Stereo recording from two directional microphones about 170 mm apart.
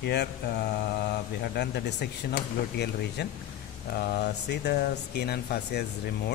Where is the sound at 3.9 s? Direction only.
65° left (ahead or behind).